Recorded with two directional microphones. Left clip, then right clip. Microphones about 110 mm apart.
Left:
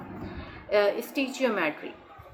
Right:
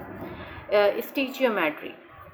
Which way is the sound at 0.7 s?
30° right (ahead or behind).